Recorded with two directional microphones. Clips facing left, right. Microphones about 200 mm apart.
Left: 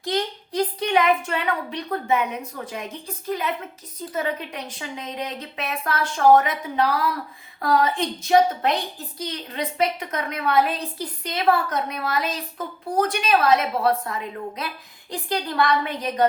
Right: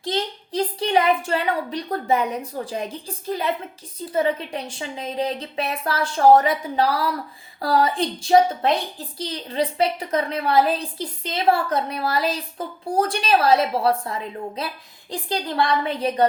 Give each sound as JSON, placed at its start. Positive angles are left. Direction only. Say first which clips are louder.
{"t": 0.0, "sound": "a woman's voice", "louder": "even", "side_deg": -25}